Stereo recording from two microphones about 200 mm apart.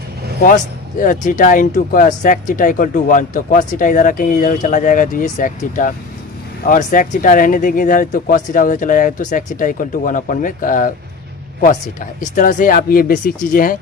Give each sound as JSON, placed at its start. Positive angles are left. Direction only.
{"t": 0.4, "sound": "speech", "side_deg": 40}